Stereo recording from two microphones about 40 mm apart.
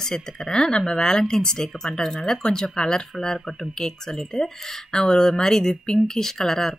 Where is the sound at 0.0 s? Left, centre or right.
Centre.